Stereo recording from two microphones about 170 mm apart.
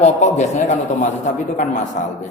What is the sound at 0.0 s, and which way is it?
A man's voice, 40° left (ahead or behind).